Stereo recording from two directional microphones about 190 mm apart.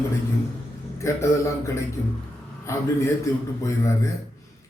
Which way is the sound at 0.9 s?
15° left (ahead or behind).